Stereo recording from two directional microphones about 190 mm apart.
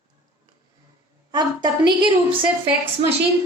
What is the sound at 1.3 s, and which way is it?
Speech, 20° right (ahead or behind).